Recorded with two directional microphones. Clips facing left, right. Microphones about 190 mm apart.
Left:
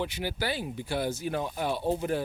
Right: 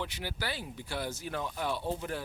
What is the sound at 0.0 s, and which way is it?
Speech, 15° left (ahead or behind).